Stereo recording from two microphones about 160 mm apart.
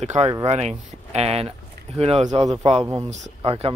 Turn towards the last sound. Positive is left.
turn(degrees=-35)  # may be behind; listen again after turning